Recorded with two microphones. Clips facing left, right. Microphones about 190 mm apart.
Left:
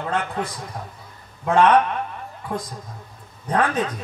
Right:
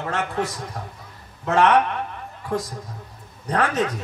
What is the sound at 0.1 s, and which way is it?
Speech, 75° right (ahead or behind).